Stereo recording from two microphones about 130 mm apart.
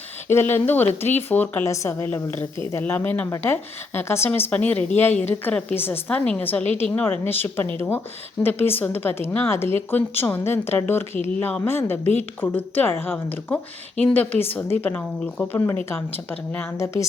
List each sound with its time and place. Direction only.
0.3 s speech: 20° left (ahead or behind)